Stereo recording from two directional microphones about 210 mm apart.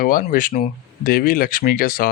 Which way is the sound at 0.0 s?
40° left (ahead or behind).